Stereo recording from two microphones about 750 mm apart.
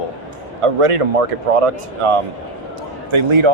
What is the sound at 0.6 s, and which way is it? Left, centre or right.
Speech, right.